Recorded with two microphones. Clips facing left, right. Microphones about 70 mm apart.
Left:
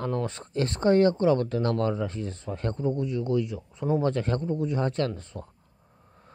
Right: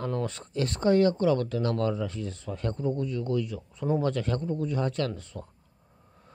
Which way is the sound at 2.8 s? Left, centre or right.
Left.